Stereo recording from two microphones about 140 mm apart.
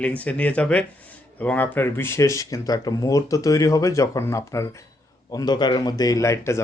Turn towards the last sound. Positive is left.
turn(degrees=20)  # may be behind; listen again after turning